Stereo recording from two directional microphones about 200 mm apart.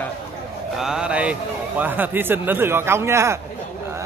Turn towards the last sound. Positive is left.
turn(degrees=-15)  # may be behind; listen again after turning